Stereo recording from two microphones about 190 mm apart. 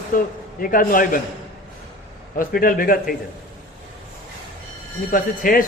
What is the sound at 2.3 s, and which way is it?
Speech, 50° left (ahead or behind).